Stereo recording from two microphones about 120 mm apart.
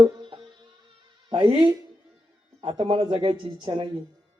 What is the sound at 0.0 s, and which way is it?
Music, 45° right (ahead or behind).